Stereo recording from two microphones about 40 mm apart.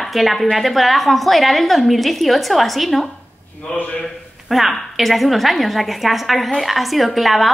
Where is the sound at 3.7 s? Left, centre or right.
Left.